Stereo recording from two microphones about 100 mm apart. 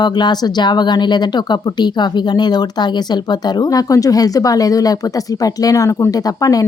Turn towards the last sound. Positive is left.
turn(degrees=35)  # may be behind; listen again after turning